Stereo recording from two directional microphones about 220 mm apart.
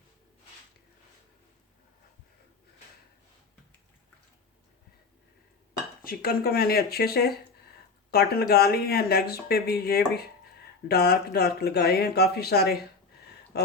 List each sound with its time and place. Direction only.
6.0 s speech: 40° left (ahead or behind)